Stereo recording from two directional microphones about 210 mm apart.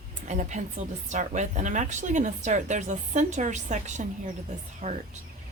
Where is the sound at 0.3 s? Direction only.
35° right (ahead or behind).